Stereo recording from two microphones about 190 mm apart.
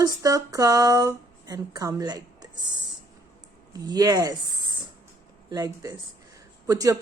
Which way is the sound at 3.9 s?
20° right (ahead or behind).